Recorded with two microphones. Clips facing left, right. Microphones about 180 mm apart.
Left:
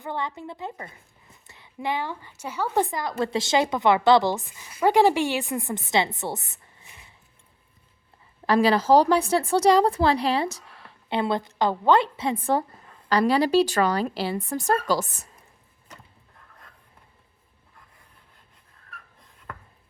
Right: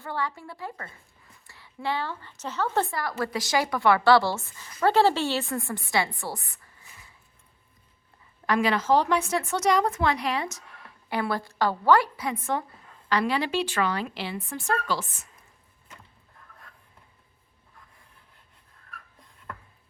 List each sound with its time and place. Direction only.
0.0 s a woman's voice: 20° left (ahead or behind)
8.4 s a woman's voice: 35° left (ahead or behind)